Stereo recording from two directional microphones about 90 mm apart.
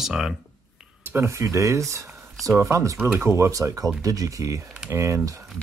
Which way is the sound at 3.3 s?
35° right (ahead or behind).